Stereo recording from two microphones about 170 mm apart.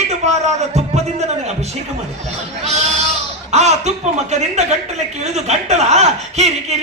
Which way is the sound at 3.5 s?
40° right (ahead or behind).